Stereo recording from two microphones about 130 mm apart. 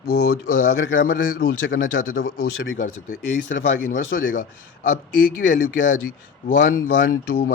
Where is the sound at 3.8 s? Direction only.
85° left.